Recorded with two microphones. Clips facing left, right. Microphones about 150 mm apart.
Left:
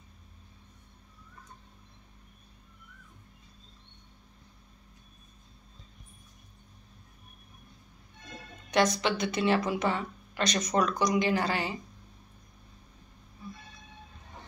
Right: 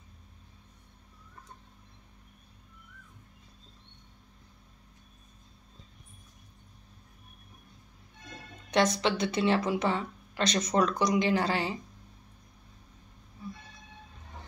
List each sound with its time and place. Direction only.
8.6 s a woman's voice: 30° right (ahead or behind)